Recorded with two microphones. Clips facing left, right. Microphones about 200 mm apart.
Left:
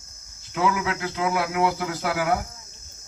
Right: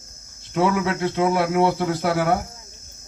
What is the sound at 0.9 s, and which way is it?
Speech, 30° right (ahead or behind).